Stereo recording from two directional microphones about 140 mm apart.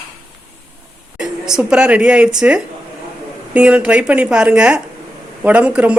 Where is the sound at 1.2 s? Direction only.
5° right (ahead or behind).